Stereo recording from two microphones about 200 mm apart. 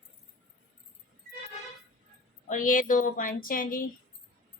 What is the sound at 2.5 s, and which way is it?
A woman's voice, 40° left (ahead or behind).